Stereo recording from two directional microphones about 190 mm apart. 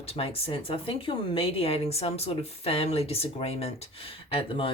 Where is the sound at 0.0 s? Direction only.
30° left (ahead or behind).